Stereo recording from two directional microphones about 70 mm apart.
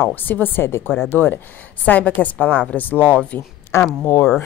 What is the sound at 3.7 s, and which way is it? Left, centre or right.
Speech, left.